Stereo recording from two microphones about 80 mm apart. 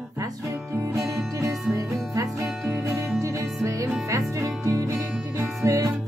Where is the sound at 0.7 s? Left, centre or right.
Right.